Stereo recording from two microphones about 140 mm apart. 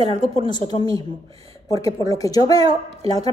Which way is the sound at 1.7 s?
25° left (ahead or behind).